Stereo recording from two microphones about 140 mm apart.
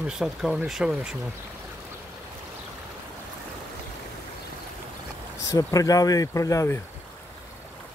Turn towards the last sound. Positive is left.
turn(degrees=20)  # may be behind; listen again after turning